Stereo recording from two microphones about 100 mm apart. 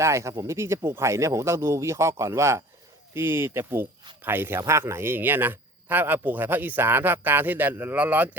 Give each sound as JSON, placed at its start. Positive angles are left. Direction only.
{"t": 0.0, "sound": "a man's voice", "side_deg": -30}